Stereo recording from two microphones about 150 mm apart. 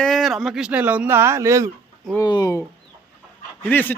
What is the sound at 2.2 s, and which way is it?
Speech, 25° left (ahead or behind).